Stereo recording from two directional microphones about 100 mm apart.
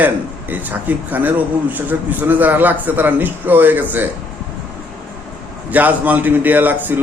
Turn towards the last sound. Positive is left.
turn(degrees=-20)  # may be behind; listen again after turning